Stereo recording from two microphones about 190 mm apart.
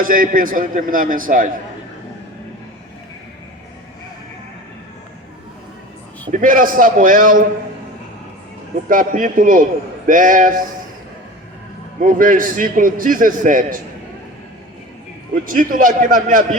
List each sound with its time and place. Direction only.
0.0 s a man's voice: 45° right (ahead or behind)
6.3 s a man's voice: 45° right (ahead or behind)
8.9 s a man's voice: 45° right (ahead or behind)
12.0 s a man's voice: 45° right (ahead or behind)
15.4 s a man's voice: 45° right (ahead or behind)